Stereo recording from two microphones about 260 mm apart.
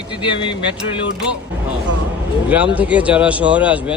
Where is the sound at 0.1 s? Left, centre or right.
Centre.